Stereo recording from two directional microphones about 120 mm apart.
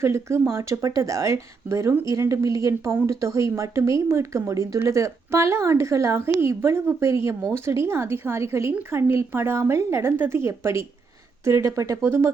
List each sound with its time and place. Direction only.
0.0 s speech: 20° right (ahead or behind)